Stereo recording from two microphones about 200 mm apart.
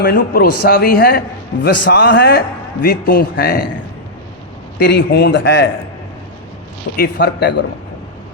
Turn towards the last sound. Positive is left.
turn(degrees=55)  # may be behind; listen again after turning